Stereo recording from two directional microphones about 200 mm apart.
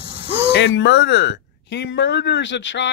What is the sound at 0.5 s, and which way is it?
Speech, 60° left (ahead or behind).